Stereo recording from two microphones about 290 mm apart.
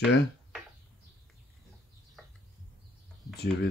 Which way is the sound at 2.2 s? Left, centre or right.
Centre.